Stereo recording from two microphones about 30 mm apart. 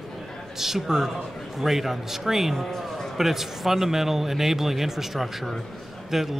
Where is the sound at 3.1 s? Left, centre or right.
Centre.